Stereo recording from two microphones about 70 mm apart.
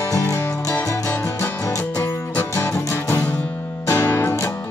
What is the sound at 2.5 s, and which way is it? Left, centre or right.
Music, left.